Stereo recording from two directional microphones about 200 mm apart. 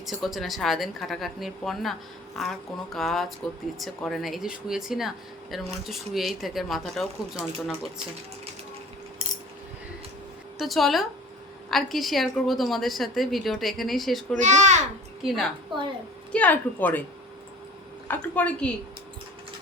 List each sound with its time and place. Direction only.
0.0 s speech: centre (ahead or behind)
10.6 s speech: centre (ahead or behind)
14.3 s a child's voice: 35° right (ahead or behind)
15.3 s a woman's voice: centre (ahead or behind)
18.1 s a woman's voice: 10° left (ahead or behind)